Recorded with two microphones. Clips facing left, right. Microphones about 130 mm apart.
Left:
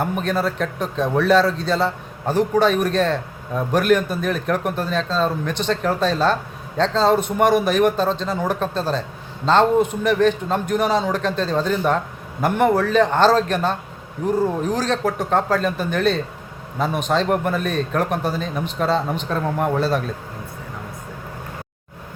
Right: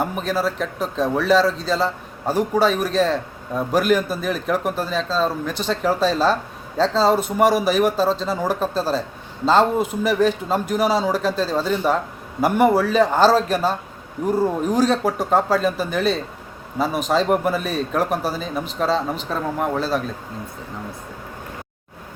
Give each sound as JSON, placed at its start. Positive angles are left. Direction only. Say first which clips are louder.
{"t": 0.0, "sound": "a man's voice", "louder": "left 1 dB", "side_deg": 0}